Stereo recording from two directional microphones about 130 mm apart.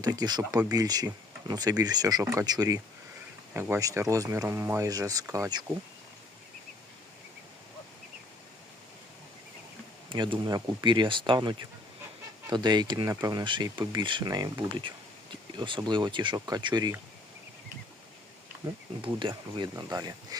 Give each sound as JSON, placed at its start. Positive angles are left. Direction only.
{"t": 0.0, "sound": "speech", "side_deg": -30}
{"t": 10.1, "sound": "speech", "side_deg": -40}
{"t": 18.6, "sound": "speech", "side_deg": -35}